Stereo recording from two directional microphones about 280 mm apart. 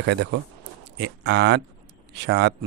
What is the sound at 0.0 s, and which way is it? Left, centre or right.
Speech, right.